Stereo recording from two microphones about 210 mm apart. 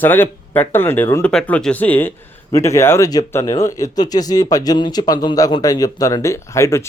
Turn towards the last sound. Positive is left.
turn(degrees=15)  # may be behind; listen again after turning